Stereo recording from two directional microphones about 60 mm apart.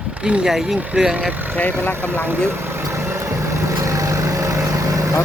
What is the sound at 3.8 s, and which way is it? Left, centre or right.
Vehicle, right.